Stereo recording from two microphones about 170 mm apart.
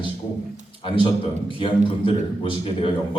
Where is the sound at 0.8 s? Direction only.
30° left (ahead or behind).